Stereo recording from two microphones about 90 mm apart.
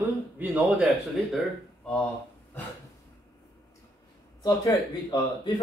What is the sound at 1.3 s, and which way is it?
Speech, 5° left (ahead or behind).